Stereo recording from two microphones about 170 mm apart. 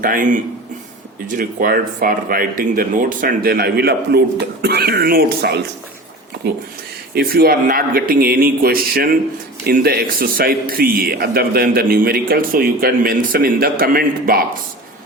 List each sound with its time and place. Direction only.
0.0 s a man's voice: 55° right (ahead or behind)
7.1 s a man's voice: 65° right (ahead or behind)